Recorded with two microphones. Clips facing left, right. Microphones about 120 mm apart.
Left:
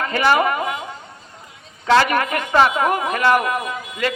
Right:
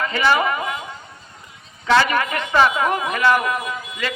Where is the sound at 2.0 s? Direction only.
45° left (ahead or behind).